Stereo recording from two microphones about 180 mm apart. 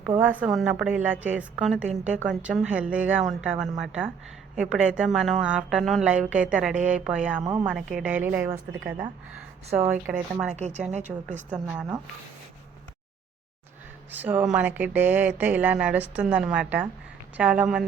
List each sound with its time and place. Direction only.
0.2 s a woman's voice: 10° right (ahead or behind)
10.1 s speech: 15° right (ahead or behind)
10.9 s speech: 40° right (ahead or behind)
11.3 s speech: 10° right (ahead or behind)
14.1 s speech: 10° right (ahead or behind)